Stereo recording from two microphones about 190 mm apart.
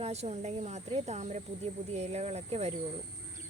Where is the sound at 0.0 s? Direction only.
35° right (ahead or behind).